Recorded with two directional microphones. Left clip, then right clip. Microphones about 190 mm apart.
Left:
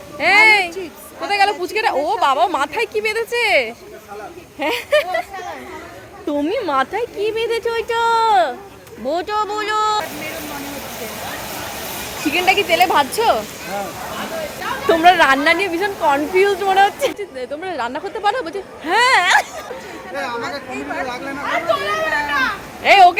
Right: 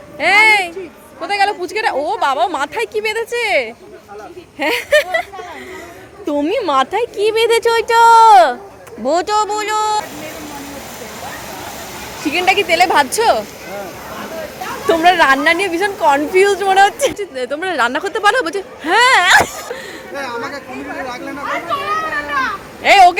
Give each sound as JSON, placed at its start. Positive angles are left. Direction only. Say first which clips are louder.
{"t": 0.2, "sound": "a sound", "louder": "right 1 dB", "side_deg": -10}
{"t": 1.2, "sound": "speech", "louder": "right 1 dB", "side_deg": -5}
{"t": 4.6, "sound": "a woman's voice", "louder": "right 3 dB", "side_deg": -20}
{"t": 6.2, "sound": "a woman's voice", "louder": "right 3 dB", "side_deg": -20}
{"t": 12.3, "sound": "a woman's voice", "louder": "right 2 dB", "side_deg": -10}
{"t": 14.8, "sound": "a woman's voice", "louder": "right 1 dB", "side_deg": -10}
{"t": 17.3, "sound": "speech", "louder": "right 6 dB", "side_deg": -35}
{"t": 20.1, "sound": "a woman's voice", "louder": "even", "side_deg": -20}
{"t": 21.1, "sound": "speech", "louder": "even", "side_deg": 0}
{"t": 22.8, "sound": "a woman's voice", "louder": "right 2 dB", "side_deg": -15}